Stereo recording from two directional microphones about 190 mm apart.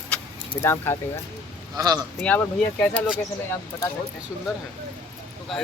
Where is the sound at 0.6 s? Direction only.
10° left (ahead or behind).